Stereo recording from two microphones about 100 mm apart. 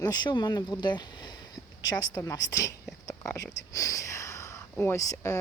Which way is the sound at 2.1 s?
35° left (ahead or behind).